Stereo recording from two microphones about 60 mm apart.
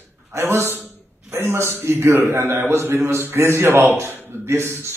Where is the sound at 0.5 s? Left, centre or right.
Right.